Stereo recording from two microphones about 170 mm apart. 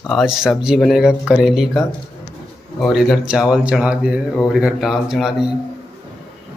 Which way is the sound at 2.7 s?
Centre (ahead or behind).